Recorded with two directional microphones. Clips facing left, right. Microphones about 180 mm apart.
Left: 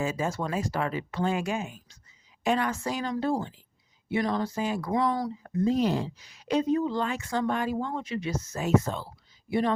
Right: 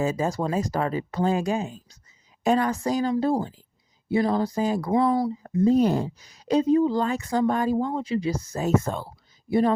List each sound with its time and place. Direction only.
0.0 s speech: 40° right (ahead or behind)